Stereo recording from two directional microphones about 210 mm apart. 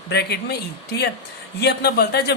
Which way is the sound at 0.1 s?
50° left (ahead or behind).